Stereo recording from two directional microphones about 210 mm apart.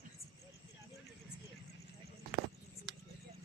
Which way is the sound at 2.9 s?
60° right (ahead or behind).